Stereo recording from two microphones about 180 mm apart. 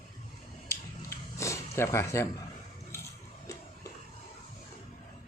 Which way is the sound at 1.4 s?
15° left (ahead or behind).